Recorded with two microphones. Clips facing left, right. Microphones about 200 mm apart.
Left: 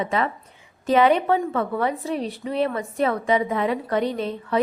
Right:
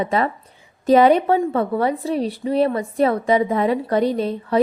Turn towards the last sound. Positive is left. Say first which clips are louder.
# right 4 dB
turn(degrees=-35)  # may be behind; listen again after turning